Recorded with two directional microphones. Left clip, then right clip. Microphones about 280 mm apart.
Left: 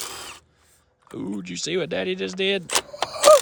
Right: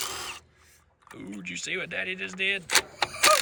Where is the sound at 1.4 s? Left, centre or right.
Centre.